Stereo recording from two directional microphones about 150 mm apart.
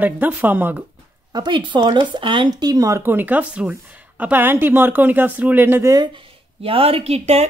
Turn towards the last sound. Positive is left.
turn(degrees=-45)  # may be behind; listen again after turning